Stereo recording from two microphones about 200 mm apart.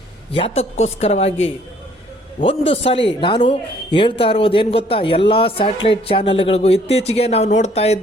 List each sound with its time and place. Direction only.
0.3 s speech: 30° left (ahead or behind)
2.4 s speech: 25° left (ahead or behind)